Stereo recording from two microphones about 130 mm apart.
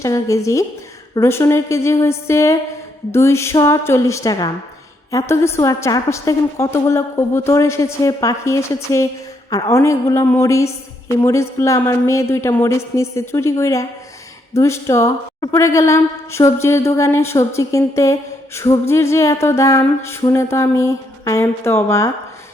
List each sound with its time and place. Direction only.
0.0 s a woman's voice: 25° left (ahead or behind)